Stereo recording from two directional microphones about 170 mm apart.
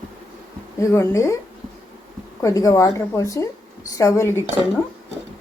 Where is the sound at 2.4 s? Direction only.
20° left (ahead or behind).